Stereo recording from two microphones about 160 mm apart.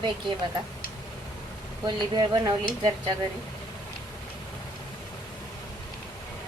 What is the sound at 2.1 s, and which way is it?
Speech, 25° right (ahead or behind).